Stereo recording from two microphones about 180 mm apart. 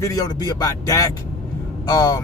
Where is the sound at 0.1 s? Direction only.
20° left (ahead or behind).